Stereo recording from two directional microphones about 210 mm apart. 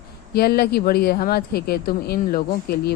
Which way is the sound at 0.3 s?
50° left (ahead or behind).